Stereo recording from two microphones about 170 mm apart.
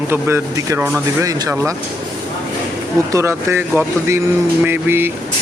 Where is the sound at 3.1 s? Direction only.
15° right (ahead or behind).